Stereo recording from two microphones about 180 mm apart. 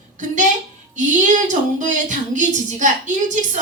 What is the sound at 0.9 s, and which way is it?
A woman's voice, 45° right (ahead or behind).